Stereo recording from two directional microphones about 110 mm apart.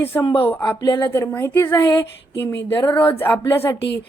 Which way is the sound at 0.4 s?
20° left (ahead or behind).